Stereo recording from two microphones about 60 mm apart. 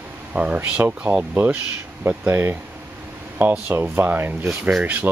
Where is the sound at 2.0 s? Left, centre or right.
Right.